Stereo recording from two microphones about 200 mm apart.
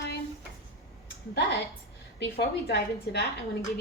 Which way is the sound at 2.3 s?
50° left (ahead or behind).